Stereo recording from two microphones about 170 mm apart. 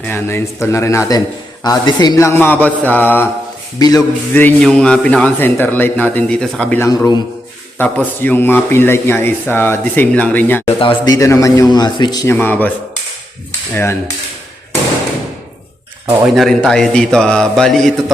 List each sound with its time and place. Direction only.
0.0 s speech: 15° left (ahead or behind)
3.8 s a man's voice: 20° left (ahead or behind)
4.4 s speech: 5° left (ahead or behind)
6.8 s a man's voice: 20° left (ahead or behind)
10.8 s a man's voice: 25° left (ahead or behind); by 12.7 s 10° left (ahead or behind)
16.3 s a man's voice: centre (ahead or behind)